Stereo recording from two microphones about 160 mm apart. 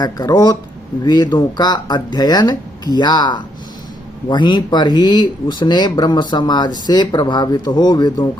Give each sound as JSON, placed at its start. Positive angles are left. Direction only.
{"t": 0.0, "sound": "speech", "side_deg": 25}